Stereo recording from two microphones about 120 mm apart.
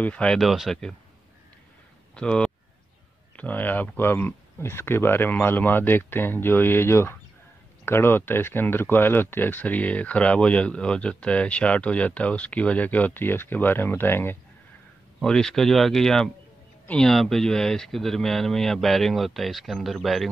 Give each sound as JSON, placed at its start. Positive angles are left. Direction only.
{"t": 0.0, "sound": "speech", "side_deg": 10}
{"t": 2.1, "sound": "speech", "side_deg": 5}
{"t": 15.1, "sound": "speech", "side_deg": 5}